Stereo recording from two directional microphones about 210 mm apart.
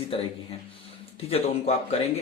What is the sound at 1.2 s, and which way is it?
Speech, 30° left (ahead or behind).